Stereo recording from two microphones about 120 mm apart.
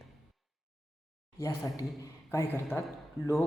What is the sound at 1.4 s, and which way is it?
A man's voice, 25° left (ahead or behind).